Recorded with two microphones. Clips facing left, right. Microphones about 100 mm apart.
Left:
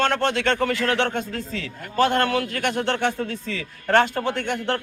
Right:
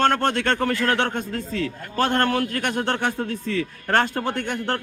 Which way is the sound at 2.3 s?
45° right (ahead or behind).